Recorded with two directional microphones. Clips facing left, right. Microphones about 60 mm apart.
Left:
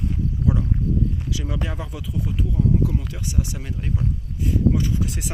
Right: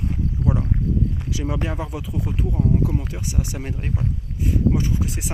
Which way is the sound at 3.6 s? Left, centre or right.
Right.